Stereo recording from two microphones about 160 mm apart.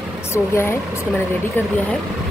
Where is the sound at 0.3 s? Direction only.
15° left (ahead or behind).